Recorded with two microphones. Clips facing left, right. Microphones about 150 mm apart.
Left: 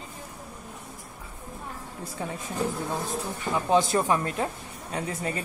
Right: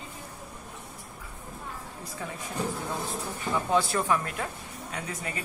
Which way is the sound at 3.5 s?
20° left (ahead or behind).